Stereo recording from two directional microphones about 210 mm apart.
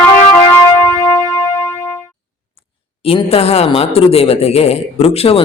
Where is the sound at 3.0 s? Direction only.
25° left (ahead or behind).